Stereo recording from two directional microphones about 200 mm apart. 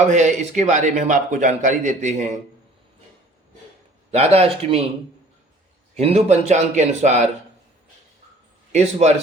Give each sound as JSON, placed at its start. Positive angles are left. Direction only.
{"t": 0.1, "sound": "a man's voice", "side_deg": -35}
{"t": 4.1, "sound": "a man's voice", "side_deg": -30}
{"t": 6.0, "sound": "a man's voice", "side_deg": -30}
{"t": 8.7, "sound": "a man's voice", "side_deg": -35}